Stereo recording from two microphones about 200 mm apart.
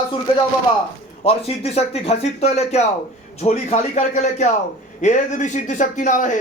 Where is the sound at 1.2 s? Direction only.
30° left (ahead or behind).